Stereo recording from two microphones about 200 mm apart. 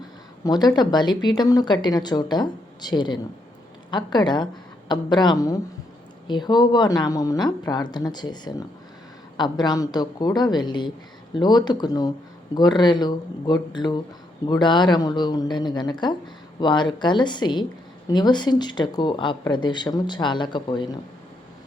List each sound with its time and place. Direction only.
0.4 s speech: 20° left (ahead or behind)